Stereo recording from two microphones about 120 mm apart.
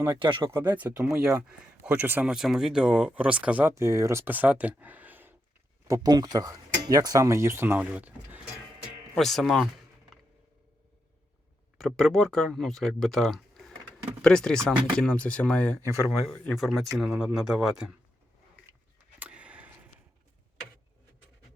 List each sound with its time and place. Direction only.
0.2 s speech: 40° right (ahead or behind)
0.5 s speech: 20° right (ahead or behind)
5.9 s speech: 35° right (ahead or behind); by 8.5 s 15° right (ahead or behind)
9.1 s speech: centre (ahead or behind)
11.8 s speech: 5° left (ahead or behind)
19.2 s a sound: 10° right (ahead or behind)